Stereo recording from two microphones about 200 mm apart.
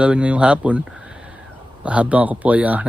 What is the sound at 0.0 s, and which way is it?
Speech, 5° right (ahead or behind).